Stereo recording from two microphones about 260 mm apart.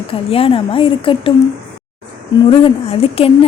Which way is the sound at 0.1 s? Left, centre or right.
Left.